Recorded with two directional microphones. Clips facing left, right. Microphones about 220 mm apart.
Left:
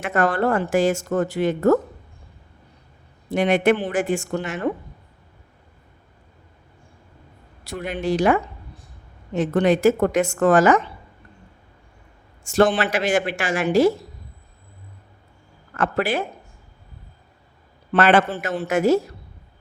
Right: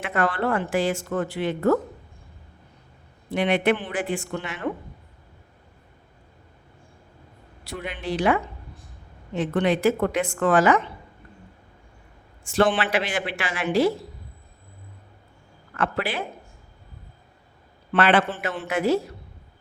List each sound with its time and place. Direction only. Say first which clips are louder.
0.0 s a woman's voice: left 4 dB; 45° left (ahead or behind)
3.2 s a woman's voice: left 4 dB; 45° left (ahead or behind)
7.6 s a woman's voice: left 6 dB; 45° left (ahead or behind)
12.5 s a woman's voice: left 3 dB; 45° left (ahead or behind)
15.7 s a woman's voice: left 4 dB; 45° left (ahead or behind)
17.9 s a woman's voice: left 3 dB; 45° left (ahead or behind)